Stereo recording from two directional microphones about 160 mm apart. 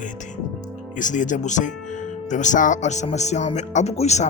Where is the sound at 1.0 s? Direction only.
50° left (ahead or behind).